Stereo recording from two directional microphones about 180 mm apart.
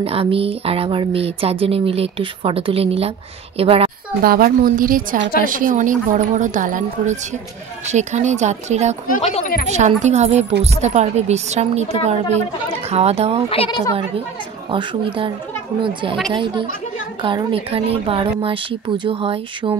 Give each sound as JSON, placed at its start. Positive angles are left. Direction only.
{"t": 0.0, "sound": "speech", "side_deg": -30}
{"t": 4.2, "sound": "speech", "side_deg": -55}
{"t": 9.2, "sound": "speech", "side_deg": 35}
{"t": 9.7, "sound": "speech", "side_deg": -40}
{"t": 13.5, "sound": "speech", "side_deg": 30}
{"t": 14.7, "sound": "speech", "side_deg": -30}
{"t": 17.2, "sound": "speech", "side_deg": -25}